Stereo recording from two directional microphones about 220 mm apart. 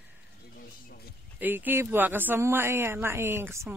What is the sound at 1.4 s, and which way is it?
Speech, 10° right (ahead or behind).